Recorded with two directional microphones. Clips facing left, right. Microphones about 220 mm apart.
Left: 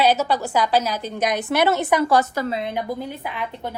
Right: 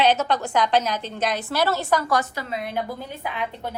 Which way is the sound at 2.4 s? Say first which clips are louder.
Left 9 dB; 45° left (ahead or behind).